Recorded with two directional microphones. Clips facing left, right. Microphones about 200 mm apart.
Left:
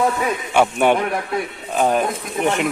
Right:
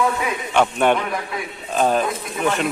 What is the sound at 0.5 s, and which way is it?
Speech, 10° left (ahead or behind).